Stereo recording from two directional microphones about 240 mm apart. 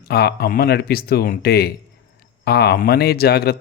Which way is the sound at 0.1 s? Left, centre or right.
Left.